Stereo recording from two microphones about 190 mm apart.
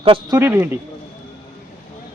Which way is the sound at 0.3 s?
10° right (ahead or behind).